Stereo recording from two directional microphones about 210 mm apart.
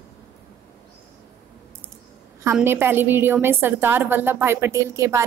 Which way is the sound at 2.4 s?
10° right (ahead or behind).